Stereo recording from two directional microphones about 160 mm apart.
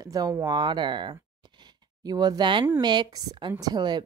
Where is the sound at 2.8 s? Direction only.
25° right (ahead or behind).